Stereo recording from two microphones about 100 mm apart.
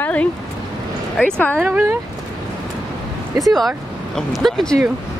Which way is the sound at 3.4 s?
Centre (ahead or behind).